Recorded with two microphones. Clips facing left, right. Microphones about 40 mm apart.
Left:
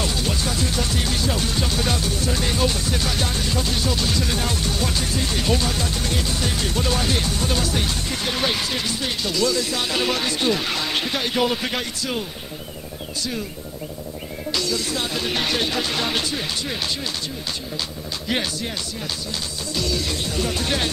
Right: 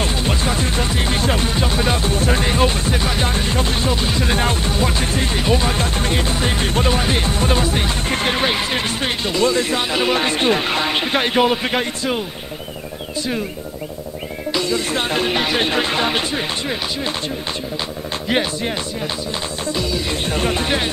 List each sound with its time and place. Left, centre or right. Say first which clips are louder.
0.0 s music: right 4 dB; right
1.5 s music: right 4 dB; right
2.0 s music: right 5 dB; right
5.4 s music: right 4 dB; right
5.8 s music: right 5 dB; right
9.8 s music: right 4 dB; right
10.2 s a sound: right 5 dB; right
11.1 s a man's voice: right 6 dB; right
14.5 s music: right 4 dB; right
14.9 s speech: right 6 dB; right
15.2 s a man's voice: right 4 dB; right
19.7 s a man's voice: right 2 dB; right
20.1 s speech: right 5 dB; right
20.6 s a man's voice: right 3 dB; right